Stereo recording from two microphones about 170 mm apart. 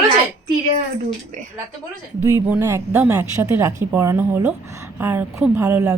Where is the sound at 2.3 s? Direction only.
15° right (ahead or behind).